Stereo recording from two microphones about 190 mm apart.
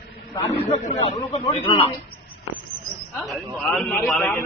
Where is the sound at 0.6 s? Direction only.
30° left (ahead or behind).